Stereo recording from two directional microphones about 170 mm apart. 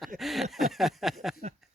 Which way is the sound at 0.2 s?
Centre (ahead or behind).